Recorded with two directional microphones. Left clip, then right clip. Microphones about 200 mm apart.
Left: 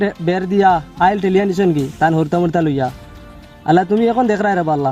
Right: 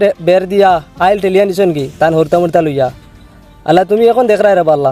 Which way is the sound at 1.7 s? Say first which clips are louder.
Right 2 dB; centre (ahead or behind).